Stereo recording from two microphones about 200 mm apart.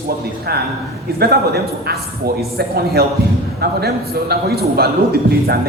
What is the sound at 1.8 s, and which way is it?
A man's voice, 50° right (ahead or behind).